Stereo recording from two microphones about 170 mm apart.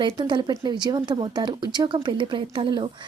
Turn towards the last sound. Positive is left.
turn(degrees=-30)  # may be behind; listen again after turning